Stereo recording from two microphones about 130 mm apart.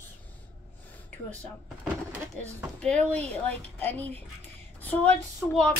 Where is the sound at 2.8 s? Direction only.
10° left (ahead or behind).